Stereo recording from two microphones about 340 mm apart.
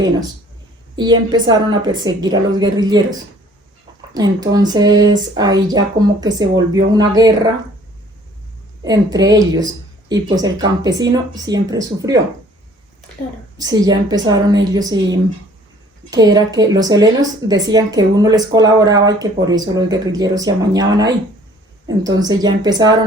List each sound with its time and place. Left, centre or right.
0.9 s speech: centre
4.1 s speech: centre
8.8 s speech: centre
13.6 s speech: centre
16.0 s speech: centre